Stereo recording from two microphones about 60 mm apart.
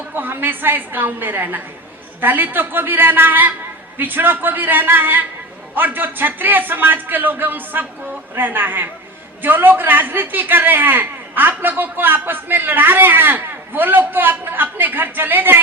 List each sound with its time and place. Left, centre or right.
0.1 s a man's voice: right